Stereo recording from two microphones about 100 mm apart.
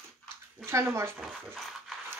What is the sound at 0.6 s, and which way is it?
Speech, 25° right (ahead or behind).